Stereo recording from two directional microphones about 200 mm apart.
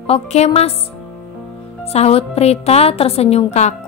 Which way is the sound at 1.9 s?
30° left (ahead or behind).